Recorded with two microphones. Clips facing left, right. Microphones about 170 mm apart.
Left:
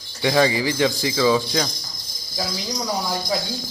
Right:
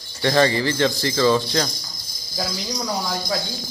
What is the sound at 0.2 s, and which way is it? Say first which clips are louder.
Speech: even; 10° left (ahead or behind).